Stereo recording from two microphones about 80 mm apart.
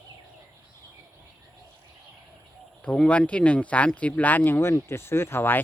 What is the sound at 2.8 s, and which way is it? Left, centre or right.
Speech, centre.